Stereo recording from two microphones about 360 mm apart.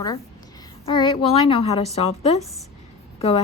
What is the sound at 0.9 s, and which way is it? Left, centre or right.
A woman's voice, centre.